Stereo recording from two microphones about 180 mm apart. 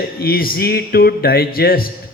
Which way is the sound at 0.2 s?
55° left (ahead or behind).